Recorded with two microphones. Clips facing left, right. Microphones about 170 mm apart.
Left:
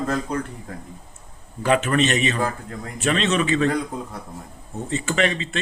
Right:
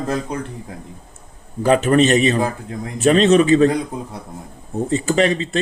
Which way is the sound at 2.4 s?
20° right (ahead or behind).